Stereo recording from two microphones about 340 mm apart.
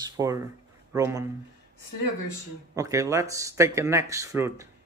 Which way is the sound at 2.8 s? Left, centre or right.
Centre.